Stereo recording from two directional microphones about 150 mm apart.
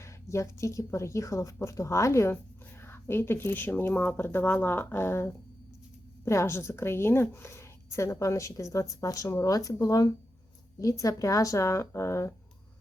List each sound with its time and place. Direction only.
0.0 s a woman's voice: 20° left (ahead or behind)